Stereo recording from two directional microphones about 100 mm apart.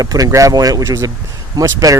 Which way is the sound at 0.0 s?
35° right (ahead or behind).